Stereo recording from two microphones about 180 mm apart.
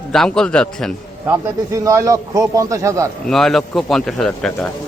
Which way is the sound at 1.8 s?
20° right (ahead or behind).